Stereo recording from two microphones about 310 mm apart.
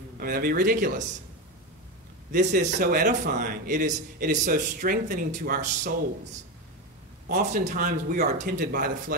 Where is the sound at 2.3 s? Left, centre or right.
Right.